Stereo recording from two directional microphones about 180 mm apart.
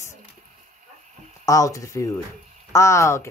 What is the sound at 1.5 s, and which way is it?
A woman's voice, 20° left (ahead or behind).